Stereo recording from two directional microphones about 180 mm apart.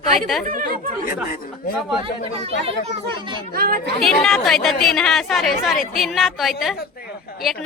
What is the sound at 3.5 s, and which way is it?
Speech, 55° right (ahead or behind).